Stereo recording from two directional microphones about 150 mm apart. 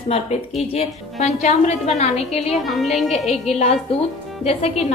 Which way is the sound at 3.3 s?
45° left (ahead or behind).